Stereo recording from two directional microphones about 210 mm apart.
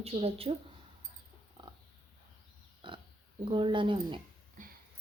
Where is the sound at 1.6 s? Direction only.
20° right (ahead or behind).